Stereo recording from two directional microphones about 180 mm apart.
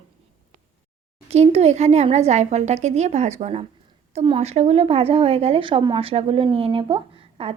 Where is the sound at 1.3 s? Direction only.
35° right (ahead or behind).